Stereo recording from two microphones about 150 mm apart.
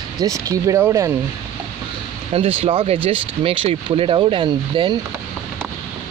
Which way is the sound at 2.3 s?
40° right (ahead or behind).